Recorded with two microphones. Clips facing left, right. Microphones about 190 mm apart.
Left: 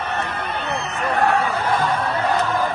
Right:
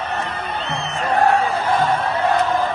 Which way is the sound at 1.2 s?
30° right (ahead or behind).